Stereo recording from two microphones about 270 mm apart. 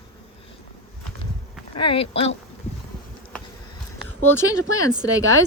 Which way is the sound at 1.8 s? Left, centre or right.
Centre.